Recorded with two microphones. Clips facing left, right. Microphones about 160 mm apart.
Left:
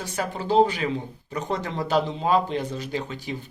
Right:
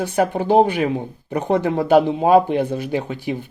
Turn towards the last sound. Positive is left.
turn(degrees=-55)  # may be behind; listen again after turning